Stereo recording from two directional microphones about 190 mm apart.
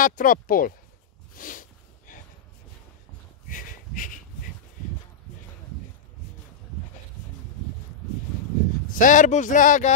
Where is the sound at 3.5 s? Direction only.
45° left (ahead or behind).